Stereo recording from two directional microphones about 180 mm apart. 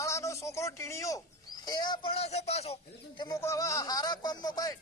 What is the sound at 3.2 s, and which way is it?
Speech, 20° left (ahead or behind).